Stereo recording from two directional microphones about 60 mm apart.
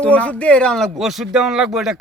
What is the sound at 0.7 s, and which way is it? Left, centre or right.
Speech, centre.